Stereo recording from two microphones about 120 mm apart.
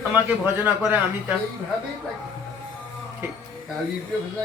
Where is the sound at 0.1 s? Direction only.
20° right (ahead or behind).